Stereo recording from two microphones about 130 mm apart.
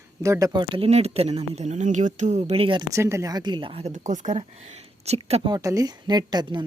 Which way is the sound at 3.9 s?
70° right (ahead or behind).